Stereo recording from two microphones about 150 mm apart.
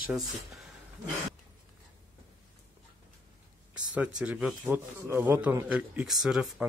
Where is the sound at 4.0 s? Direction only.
5° right (ahead or behind).